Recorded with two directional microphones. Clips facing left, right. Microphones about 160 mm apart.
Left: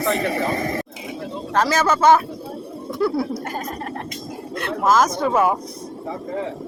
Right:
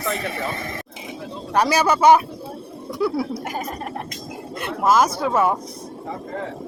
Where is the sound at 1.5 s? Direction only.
15° right (ahead or behind).